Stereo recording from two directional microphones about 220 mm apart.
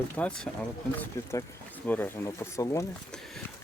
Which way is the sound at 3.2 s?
Centre (ahead or behind).